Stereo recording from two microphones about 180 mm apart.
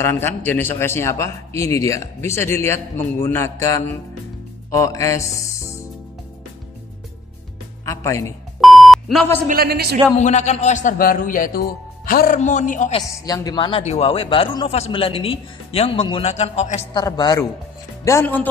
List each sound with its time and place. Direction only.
0.0 s a man's voice: 15° left (ahead or behind)
7.8 s speech: 15° left (ahead or behind)
8.5 s beep: centre (ahead or behind)
9.5 s speech: 60° right (ahead or behind)
10.1 s a man's voice: 40° left (ahead or behind)
13.1 s speech: 20° left (ahead or behind); by 16.8 s 40° left (ahead or behind)
16.9 s a man's voice: 25° left (ahead or behind)